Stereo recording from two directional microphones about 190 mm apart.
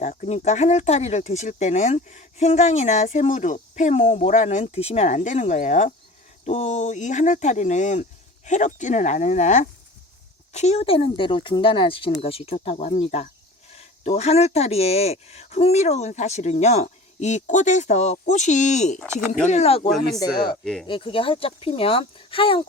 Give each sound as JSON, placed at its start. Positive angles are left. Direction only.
{"t": 0.0, "sound": "speech", "side_deg": 40}
{"t": 20.1, "sound": "speech", "side_deg": 20}